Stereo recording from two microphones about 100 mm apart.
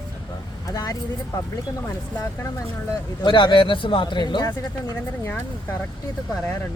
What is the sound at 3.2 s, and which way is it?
Speech, 55° left (ahead or behind).